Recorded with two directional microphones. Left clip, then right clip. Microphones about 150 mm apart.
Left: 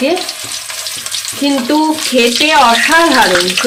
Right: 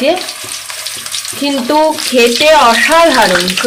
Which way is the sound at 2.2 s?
30° right (ahead or behind).